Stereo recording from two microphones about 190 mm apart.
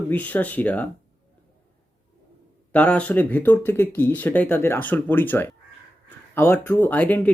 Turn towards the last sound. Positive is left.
turn(degrees=10)  # may be behind; listen again after turning